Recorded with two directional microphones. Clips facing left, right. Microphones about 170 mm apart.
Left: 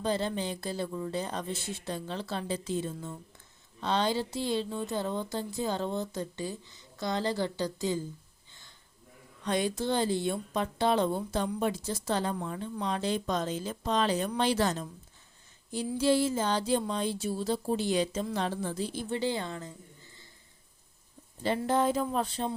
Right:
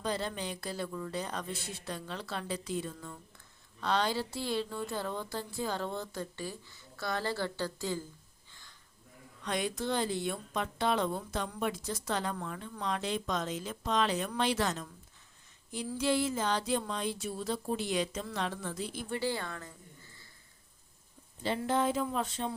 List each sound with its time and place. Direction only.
0.0 s a woman's voice: 25° left (ahead or behind)
9.4 s a woman's voice: 30° left (ahead or behind)
16.0 s a woman's voice: 30° left (ahead or behind)
21.4 s speech: 45° left (ahead or behind)